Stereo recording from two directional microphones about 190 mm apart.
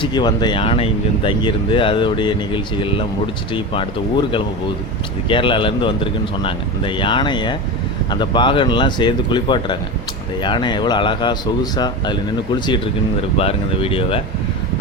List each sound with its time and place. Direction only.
0.0 s speech: 25° left (ahead or behind)
5.3 s speech: 25° left (ahead or behind)